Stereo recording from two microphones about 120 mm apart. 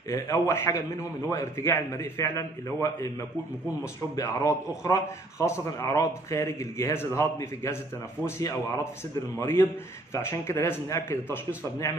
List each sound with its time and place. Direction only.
0.1 s a man's voice: 20° left (ahead or behind)